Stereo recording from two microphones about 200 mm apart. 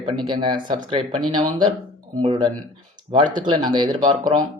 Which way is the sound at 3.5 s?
20° right (ahead or behind).